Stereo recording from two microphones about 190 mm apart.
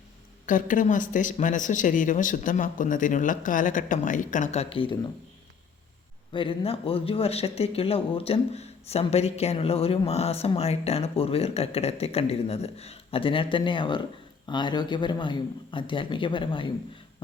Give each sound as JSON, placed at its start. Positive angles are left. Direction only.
{"t": 0.4, "sound": "speech", "side_deg": 45}
{"t": 6.3, "sound": "a man's voice", "side_deg": 25}